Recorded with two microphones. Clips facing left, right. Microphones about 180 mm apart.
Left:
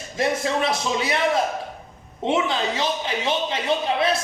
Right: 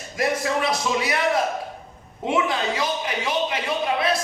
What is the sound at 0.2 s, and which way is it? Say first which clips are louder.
Speech: left 1 dB; 25° left (ahead or behind).